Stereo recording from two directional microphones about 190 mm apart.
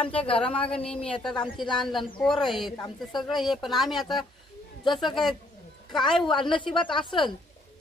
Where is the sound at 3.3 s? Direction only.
Centre (ahead or behind).